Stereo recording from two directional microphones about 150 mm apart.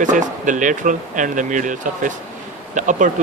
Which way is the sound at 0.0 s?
55° right (ahead or behind).